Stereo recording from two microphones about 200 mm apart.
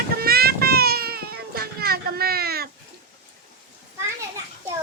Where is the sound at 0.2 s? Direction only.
50° right (ahead or behind).